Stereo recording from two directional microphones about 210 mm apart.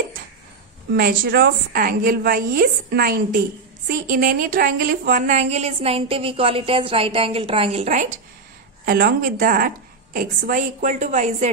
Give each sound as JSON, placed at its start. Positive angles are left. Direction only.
{"t": 0.9, "sound": "a woman's voice", "side_deg": -45}